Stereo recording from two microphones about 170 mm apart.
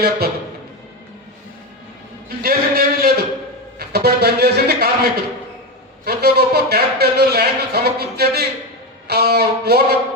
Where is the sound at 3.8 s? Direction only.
65° right (ahead or behind).